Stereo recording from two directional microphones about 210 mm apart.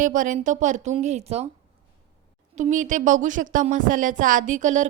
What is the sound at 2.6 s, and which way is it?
Speech, 35° right (ahead or behind).